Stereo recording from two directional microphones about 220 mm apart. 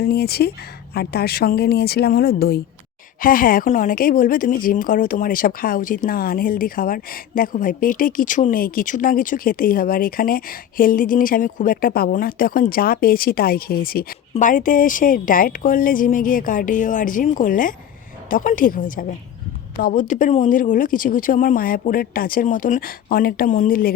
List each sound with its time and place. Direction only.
0.0 s speech: 45° left (ahead or behind)